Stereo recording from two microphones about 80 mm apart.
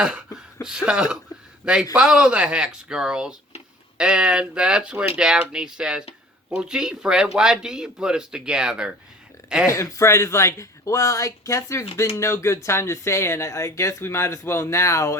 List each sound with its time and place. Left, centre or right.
0.3 s a man's voice: centre
9.6 s speech: left